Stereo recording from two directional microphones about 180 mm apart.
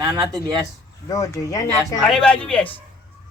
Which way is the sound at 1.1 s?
20° left (ahead or behind).